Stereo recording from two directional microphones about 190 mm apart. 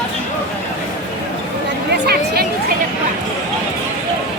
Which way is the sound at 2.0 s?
55° right (ahead or behind).